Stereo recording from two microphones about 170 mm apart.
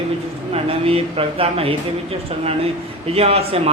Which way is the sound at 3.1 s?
35° right (ahead or behind).